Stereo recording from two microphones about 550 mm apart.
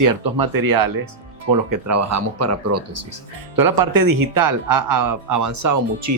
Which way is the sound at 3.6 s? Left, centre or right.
Right.